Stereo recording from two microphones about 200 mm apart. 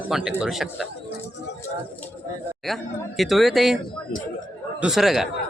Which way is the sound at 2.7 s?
Centre (ahead or behind).